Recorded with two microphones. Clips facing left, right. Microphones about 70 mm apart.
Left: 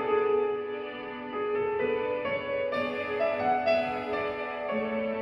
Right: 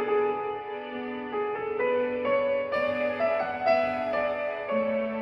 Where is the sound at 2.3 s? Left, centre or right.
Right.